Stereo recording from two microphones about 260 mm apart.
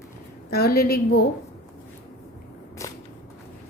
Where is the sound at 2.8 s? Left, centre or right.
Centre.